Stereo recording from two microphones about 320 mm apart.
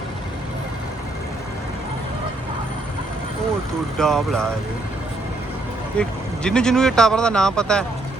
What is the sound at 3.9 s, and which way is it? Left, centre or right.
Speech, centre.